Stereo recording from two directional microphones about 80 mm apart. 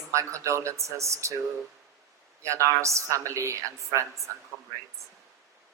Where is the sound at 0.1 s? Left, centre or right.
Right.